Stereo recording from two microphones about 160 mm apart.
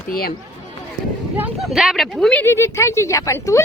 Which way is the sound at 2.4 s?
15° left (ahead or behind).